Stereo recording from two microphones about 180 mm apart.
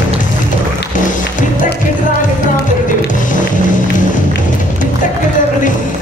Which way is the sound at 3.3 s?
45° left (ahead or behind).